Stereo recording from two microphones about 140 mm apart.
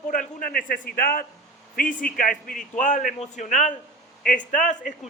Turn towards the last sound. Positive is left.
turn(degrees=65)  # may be behind; listen again after turning